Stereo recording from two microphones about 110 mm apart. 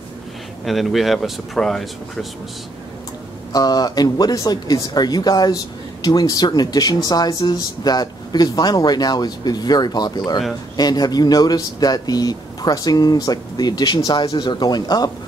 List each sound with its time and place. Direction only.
0.7 s speech: centre (ahead or behind)
3.5 s speech: 35° left (ahead or behind)